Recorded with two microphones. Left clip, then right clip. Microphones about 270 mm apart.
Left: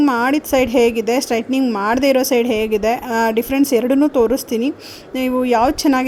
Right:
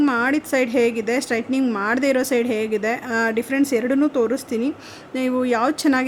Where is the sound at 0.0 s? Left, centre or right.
Centre.